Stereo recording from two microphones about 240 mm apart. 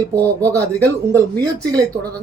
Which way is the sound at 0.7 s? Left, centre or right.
Centre.